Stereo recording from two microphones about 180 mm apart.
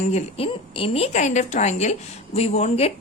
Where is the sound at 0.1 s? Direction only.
35° left (ahead or behind).